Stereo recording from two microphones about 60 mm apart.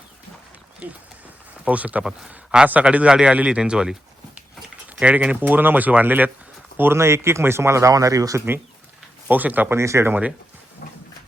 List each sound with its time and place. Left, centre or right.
1.6 s speech: right
2.0 s speech: centre
4.9 s speech: centre
6.9 s speech: right
9.3 s speech: right
9.6 s speech: right